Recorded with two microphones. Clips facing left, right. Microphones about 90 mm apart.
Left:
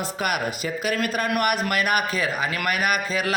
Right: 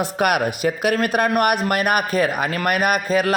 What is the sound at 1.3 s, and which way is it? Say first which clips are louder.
A man's voice: right 5 dB; 45° right (ahead or behind).